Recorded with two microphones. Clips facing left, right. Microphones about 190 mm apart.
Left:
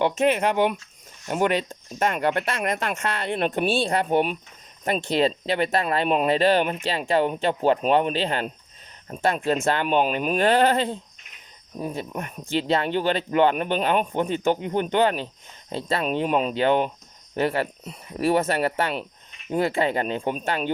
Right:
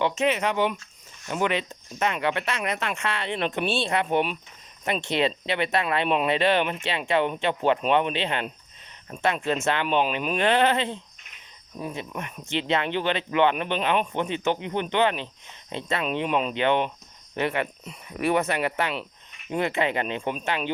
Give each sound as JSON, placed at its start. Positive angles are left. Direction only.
{"t": 0.0, "sound": "speech", "side_deg": 50}